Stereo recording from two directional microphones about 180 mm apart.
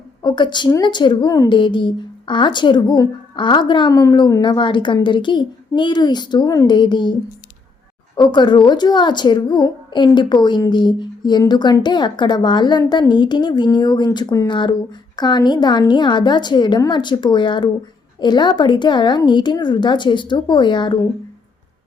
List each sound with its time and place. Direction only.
0.2 s speech: 25° left (ahead or behind)